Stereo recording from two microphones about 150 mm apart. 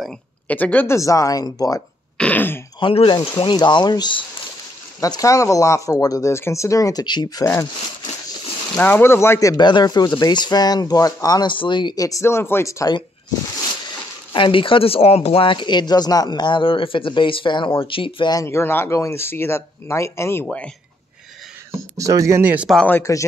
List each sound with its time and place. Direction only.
0.0 s speech: 5° left (ahead or behind); by 1.8 s 25° left (ahead or behind)
2.1 s speech: 10° left (ahead or behind)
2.8 s speech: 35° left (ahead or behind); by 7.6 s 20° left (ahead or behind)
8.7 s speech: 15° left (ahead or behind)
14.3 s speech: 35° left (ahead or behind); by 20.4 s 15° left (ahead or behind)
20.4 s speech: 5° left (ahead or behind)
21.9 s speech: 20° right (ahead or behind)
22.7 s speech: 10° left (ahead or behind)